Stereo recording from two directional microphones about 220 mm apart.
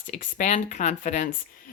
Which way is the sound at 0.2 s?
35° left (ahead or behind).